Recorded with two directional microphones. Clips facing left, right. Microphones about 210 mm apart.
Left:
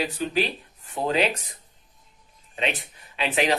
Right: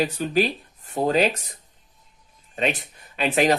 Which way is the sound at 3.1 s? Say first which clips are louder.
Right 4 dB; 45° right (ahead or behind).